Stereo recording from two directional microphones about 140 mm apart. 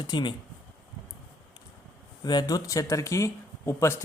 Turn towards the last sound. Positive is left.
turn(degrees=20)  # may be behind; listen again after turning